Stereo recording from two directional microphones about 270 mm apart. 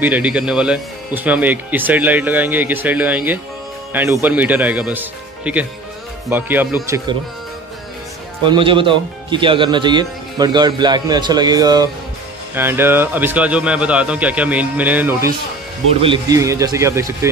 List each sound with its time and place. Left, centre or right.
0.0 s a man's voice: centre
8.5 s a man's voice: centre